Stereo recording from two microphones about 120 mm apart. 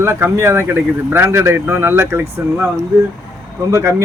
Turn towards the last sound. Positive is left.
turn(degrees=-25)  # may be behind; listen again after turning